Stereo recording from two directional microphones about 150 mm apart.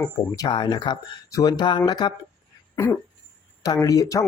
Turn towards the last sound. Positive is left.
turn(degrees=25)  # may be behind; listen again after turning